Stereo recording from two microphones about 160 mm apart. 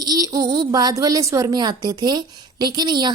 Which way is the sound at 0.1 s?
25° right (ahead or behind).